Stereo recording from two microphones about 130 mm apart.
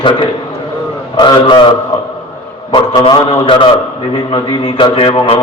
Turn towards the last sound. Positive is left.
turn(degrees=40)  # may be behind; listen again after turning